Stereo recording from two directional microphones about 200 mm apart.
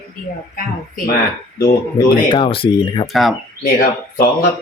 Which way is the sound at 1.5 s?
50° left (ahead or behind).